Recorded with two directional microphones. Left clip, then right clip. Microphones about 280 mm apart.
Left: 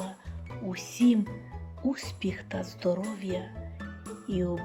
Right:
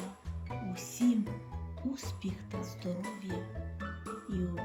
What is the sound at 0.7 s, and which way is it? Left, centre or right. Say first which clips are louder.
Music: left 6 dB; centre.